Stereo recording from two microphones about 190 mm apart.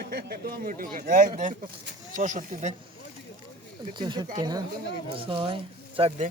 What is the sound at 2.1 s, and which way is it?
Speech, 40° right (ahead or behind).